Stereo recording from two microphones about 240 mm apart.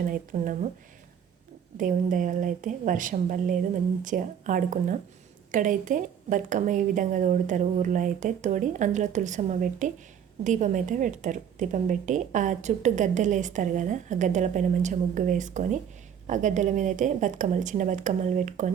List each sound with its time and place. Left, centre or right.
0.0 s a woman's voice: right
1.8 s a woman's voice: right